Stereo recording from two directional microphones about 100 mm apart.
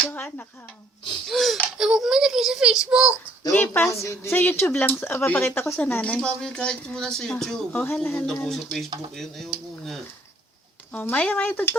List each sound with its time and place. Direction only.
0.1 s a sound: 15° left (ahead or behind)
1.3 s baby laughter: centre (ahead or behind)
1.8 s a child's voice: 5° right (ahead or behind)
3.7 s speech: 30° left (ahead or behind)
8.3 s speech: 5° left (ahead or behind)
10.9 s speech: 20° left (ahead or behind)